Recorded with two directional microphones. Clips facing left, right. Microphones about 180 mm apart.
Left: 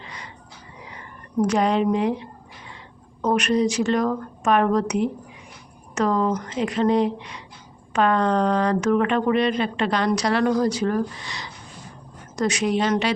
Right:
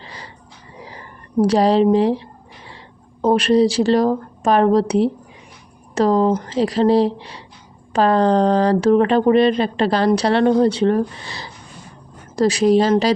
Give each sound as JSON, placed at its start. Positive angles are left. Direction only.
{"t": 0.0, "sound": "music", "side_deg": -30}
{"t": 0.8, "sound": "a sound", "side_deg": -30}
{"t": 3.2, "sound": "speech", "side_deg": -30}